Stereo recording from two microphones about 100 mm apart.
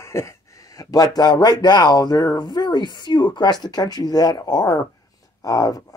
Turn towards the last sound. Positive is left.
turn(degrees=35)  # may be behind; listen again after turning